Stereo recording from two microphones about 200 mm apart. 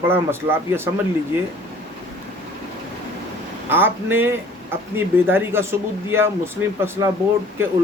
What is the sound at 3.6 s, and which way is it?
Speech, 10° right (ahead or behind).